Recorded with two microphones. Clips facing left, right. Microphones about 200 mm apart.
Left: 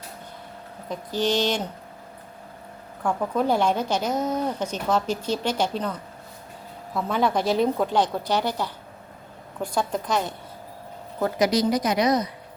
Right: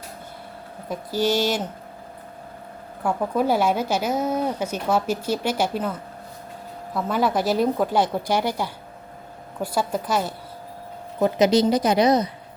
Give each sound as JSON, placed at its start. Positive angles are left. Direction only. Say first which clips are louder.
{"t": 0.9, "sound": "a woman's voice", "louder": "right 2 dB", "side_deg": -10}
{"t": 3.0, "sound": "a woman's voice", "louder": "right 2 dB", "side_deg": -10}
{"t": 11.2, "sound": "a woman's voice", "louder": "right 4 dB", "side_deg": -25}